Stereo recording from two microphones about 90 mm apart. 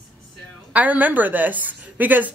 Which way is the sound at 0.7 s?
15° right (ahead or behind).